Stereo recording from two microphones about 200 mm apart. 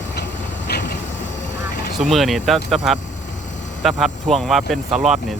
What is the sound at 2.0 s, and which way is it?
Speech, centre (ahead or behind).